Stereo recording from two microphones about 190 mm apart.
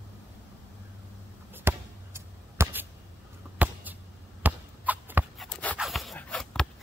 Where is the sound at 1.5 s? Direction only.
10° right (ahead or behind).